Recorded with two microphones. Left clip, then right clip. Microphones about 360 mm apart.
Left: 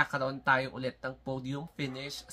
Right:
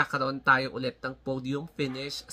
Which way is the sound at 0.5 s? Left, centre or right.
Left.